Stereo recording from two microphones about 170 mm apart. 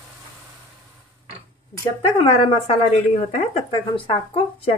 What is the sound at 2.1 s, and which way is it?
Speech, 35° left (ahead or behind).